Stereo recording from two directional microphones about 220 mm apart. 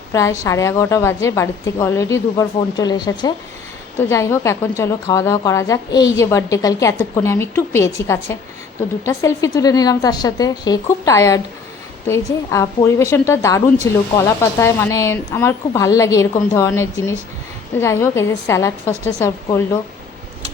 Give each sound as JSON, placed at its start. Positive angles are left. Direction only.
{"t": 0.1, "sound": "a woman's voice", "side_deg": 15}